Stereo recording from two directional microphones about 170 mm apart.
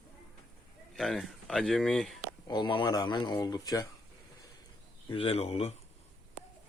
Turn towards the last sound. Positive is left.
turn(degrees=35)  # may be behind; listen again after turning